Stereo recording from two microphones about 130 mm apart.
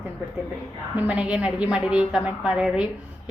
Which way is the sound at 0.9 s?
10° right (ahead or behind).